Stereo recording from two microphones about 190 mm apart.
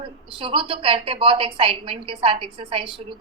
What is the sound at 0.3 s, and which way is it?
A woman's voice, 25° right (ahead or behind).